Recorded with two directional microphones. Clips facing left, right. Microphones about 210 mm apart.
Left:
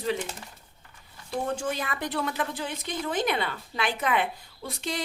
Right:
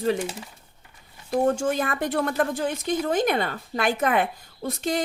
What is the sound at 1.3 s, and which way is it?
A woman's voice, 45° right (ahead or behind).